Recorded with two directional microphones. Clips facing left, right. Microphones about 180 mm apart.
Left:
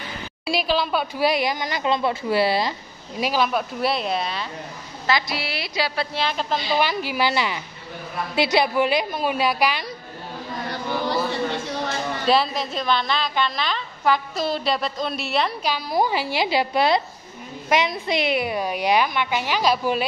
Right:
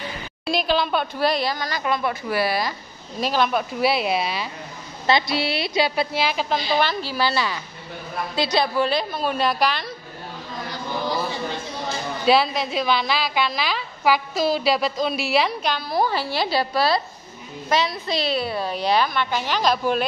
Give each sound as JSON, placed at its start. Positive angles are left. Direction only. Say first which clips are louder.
{"t": 0.5, "sound": "a woman's voice", "louder": "right 1 dB", "side_deg": 5}
{"t": 3.2, "sound": "a woman's voice", "louder": "even", "side_deg": 5}
{"t": 5.3, "sound": "a woman's voice", "louder": "right 5 dB", "side_deg": -25}
{"t": 6.1, "sound": "a woman's voice", "louder": "right 2 dB", "side_deg": -5}
{"t": 6.8, "sound": "a woman's voice", "louder": "even", "side_deg": 15}
{"t": 10.7, "sound": "a sound", "louder": "left 1 dB", "side_deg": 70}
{"t": 12.3, "sound": "a woman's voice", "louder": "right 2 dB", "side_deg": -5}
{"t": 15.6, "sound": "a woman's voice", "louder": "even", "side_deg": 10}